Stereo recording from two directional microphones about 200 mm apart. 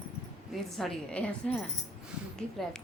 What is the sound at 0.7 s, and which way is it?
Speech, 5° left (ahead or behind).